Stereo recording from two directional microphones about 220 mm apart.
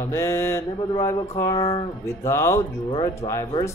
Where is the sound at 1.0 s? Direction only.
15° left (ahead or behind).